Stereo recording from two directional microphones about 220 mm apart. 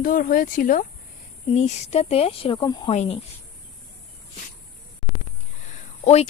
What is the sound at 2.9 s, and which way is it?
Speech, 30° left (ahead or behind).